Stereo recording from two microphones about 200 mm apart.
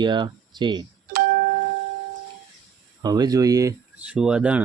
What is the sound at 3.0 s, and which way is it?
Speech, 20° right (ahead or behind).